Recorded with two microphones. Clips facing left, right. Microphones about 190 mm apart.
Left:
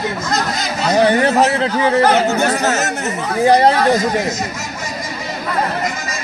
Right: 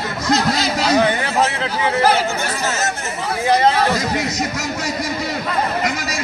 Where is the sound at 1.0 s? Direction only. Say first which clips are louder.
Left 8 dB; 40° left (ahead or behind).